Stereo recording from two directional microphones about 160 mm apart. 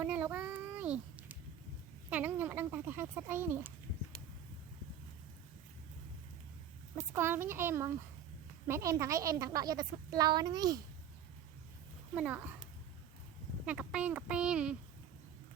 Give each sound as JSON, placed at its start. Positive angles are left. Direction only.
{"t": 0.0, "sound": "a sound", "side_deg": -10}
{"t": 7.1, "sound": "a child's voice", "side_deg": -15}
{"t": 12.1, "sound": "speech", "side_deg": -10}
{"t": 13.7, "sound": "speech", "side_deg": -5}